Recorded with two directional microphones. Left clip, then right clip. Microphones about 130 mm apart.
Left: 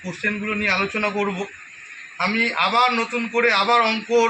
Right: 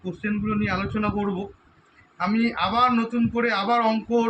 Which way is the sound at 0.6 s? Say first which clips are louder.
Left 8 dB; 45° left (ahead or behind).